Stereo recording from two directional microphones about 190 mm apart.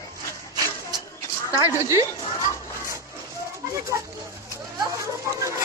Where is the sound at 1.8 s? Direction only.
15° right (ahead or behind).